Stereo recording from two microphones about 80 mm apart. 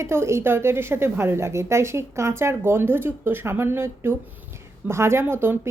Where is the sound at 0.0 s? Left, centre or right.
Right.